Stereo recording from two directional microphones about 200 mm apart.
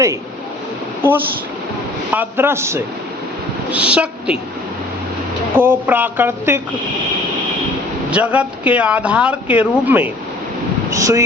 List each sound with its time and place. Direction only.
2.1 s a woman's voice: 10° right (ahead or behind)
5.5 s speech: 10° right (ahead or behind)
8.1 s speech: 5° right (ahead or behind)